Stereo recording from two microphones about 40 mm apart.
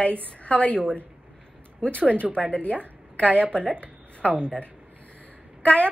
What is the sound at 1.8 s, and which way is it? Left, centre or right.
A woman's voice, left.